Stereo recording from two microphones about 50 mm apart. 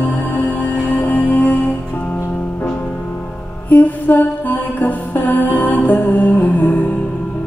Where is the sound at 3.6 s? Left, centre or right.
Left.